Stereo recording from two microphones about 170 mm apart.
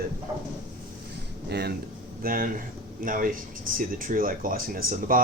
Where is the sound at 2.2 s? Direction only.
55° right (ahead or behind).